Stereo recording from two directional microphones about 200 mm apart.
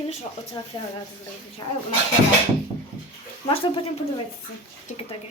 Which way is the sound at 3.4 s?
25° left (ahead or behind).